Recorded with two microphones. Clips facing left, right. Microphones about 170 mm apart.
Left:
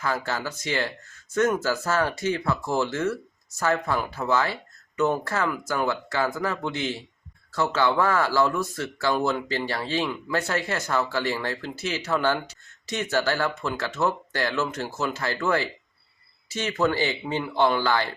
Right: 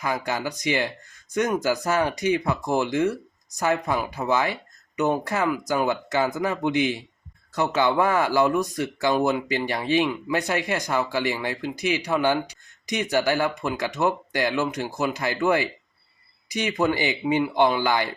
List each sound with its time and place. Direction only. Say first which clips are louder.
0.0 s speech: right 1 dB; 15° right (ahead or behind)